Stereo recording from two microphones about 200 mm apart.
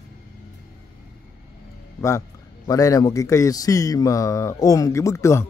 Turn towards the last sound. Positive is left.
turn(degrees=15)  # may be behind; listen again after turning